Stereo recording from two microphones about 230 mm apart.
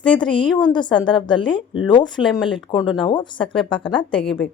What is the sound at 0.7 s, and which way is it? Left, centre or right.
Speech, centre.